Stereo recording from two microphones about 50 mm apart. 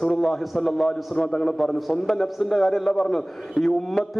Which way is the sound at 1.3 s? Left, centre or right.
Centre.